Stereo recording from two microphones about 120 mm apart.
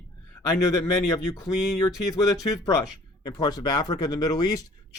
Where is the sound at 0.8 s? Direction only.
35° left (ahead or behind).